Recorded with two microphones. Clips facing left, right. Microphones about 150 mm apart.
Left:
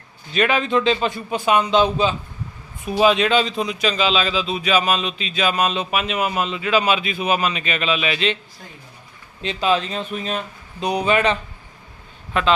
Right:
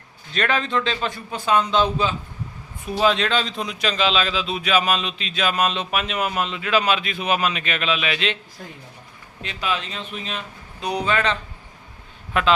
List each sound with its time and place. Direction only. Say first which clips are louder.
0.3 s a man's voice: left 4 dB; 10° left (ahead or behind)
9.4 s speech: left 7 dB; 25° left (ahead or behind)
10.8 s a man's voice: left 4 dB; 15° left (ahead or behind)
12.3 s a man's voice: left 1 dB; 5° right (ahead or behind)